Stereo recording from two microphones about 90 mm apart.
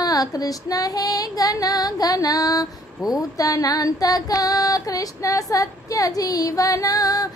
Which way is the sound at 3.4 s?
40° left (ahead or behind).